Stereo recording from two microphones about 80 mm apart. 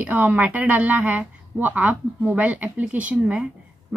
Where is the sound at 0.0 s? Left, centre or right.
Right.